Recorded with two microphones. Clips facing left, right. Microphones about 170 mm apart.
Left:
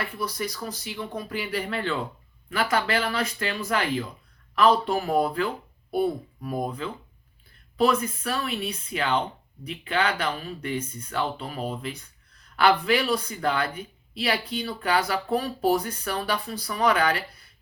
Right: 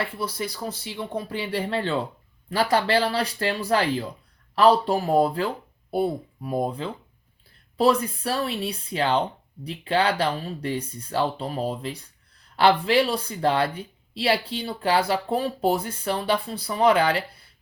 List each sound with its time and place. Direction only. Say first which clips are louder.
0.0 s speech: right 2 dB; 30° right (ahead or behind)